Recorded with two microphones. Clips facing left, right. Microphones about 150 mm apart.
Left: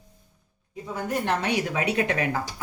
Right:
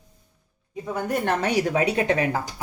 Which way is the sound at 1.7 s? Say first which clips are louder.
Right 4 dB; 30° right (ahead or behind).